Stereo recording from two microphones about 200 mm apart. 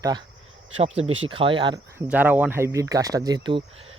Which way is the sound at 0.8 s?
30° right (ahead or behind).